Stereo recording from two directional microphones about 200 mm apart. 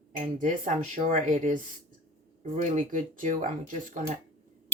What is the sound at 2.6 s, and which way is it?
Speech, 40° right (ahead or behind).